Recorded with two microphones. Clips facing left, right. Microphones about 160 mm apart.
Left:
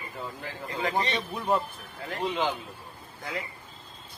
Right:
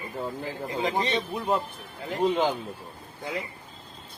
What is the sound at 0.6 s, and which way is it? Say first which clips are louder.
Speech: right 1 dB; 20° right (ahead or behind).